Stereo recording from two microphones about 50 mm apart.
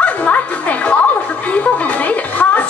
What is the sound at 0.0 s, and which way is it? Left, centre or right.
Music, left.